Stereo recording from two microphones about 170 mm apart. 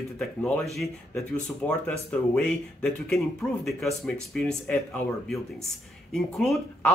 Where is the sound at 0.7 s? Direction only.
Centre (ahead or behind).